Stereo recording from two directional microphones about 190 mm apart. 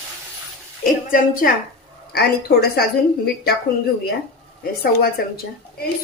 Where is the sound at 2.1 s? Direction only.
55° left (ahead or behind).